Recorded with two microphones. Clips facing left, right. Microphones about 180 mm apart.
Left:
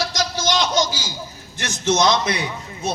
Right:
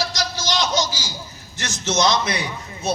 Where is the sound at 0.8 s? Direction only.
55° left (ahead or behind).